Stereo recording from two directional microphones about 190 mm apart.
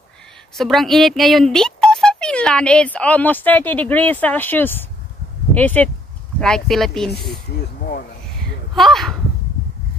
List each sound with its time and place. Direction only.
0.6 s speech: centre (ahead or behind)
7.1 s speech: 60° left (ahead or behind)
8.7 s speech: centre (ahead or behind)